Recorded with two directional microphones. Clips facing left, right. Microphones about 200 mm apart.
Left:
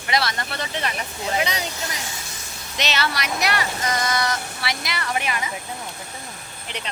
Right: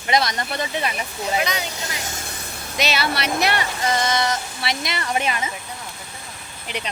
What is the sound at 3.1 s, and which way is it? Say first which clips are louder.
Speech: right 3 dB; 30° right (ahead or behind).